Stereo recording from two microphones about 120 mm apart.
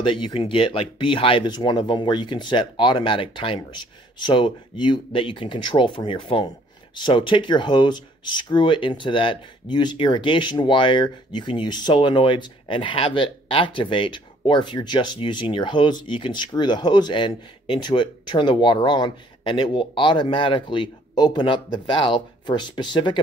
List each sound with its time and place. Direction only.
0.0 s speech: 40° left (ahead or behind)